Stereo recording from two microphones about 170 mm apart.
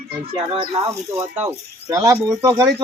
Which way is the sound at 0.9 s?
15° right (ahead or behind).